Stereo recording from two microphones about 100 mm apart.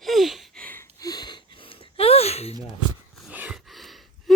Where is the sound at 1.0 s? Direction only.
40° left (ahead or behind).